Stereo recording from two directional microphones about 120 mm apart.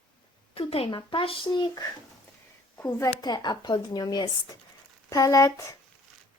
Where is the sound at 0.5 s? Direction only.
50° left (ahead or behind).